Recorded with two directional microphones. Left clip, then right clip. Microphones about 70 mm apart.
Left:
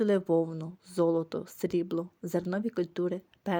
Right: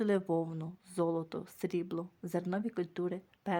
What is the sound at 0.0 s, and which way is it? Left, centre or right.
Speech, left.